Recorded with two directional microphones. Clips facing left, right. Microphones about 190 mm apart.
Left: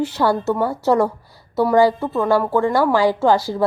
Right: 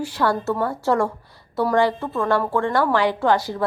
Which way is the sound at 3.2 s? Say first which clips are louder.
Left 3 dB; 30° left (ahead or behind).